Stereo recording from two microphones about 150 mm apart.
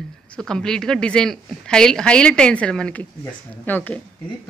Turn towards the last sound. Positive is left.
turn(degrees=10)  # may be behind; listen again after turning